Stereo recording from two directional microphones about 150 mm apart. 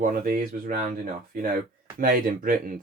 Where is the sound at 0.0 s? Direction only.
70° right (ahead or behind).